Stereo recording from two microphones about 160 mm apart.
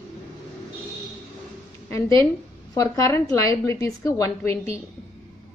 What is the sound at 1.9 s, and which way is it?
A woman's voice, 20° left (ahead or behind).